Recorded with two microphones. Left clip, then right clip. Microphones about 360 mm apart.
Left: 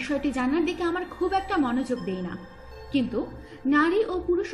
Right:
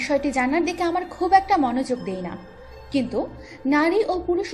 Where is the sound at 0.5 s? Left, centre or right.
Centre.